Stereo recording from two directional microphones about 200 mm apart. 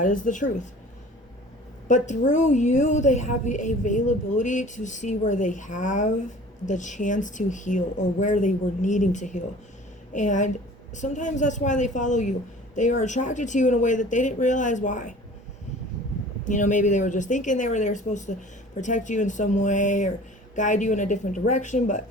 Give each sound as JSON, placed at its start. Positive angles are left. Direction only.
{"t": 0.0, "sound": "a woman's voice", "side_deg": 40}
{"t": 1.9, "sound": "a woman's voice", "side_deg": 35}
{"t": 16.4, "sound": "a woman's voice", "side_deg": 40}